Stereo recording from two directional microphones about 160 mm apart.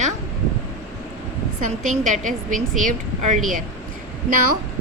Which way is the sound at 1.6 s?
50° right (ahead or behind).